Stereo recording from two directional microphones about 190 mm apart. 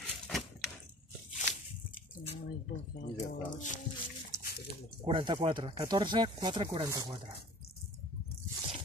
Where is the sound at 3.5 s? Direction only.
40° left (ahead or behind).